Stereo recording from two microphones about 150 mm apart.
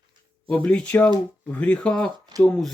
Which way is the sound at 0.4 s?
5° left (ahead or behind).